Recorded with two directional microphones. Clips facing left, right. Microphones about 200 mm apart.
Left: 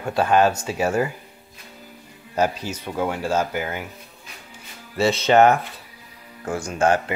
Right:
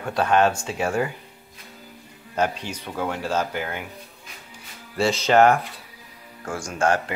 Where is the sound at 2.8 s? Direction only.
10° left (ahead or behind).